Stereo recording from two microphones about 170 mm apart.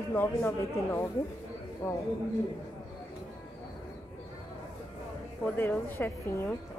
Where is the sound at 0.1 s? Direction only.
10° left (ahead or behind).